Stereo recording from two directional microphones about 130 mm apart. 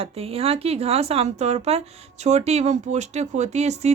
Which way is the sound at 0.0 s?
50° right (ahead or behind).